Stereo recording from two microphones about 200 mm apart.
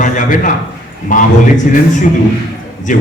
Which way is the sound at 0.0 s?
40° left (ahead or behind).